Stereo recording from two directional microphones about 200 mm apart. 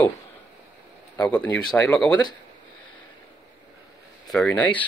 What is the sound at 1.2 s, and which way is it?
Speech, 5° left (ahead or behind).